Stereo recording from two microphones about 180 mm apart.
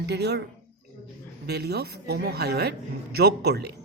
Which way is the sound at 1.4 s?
65° right (ahead or behind).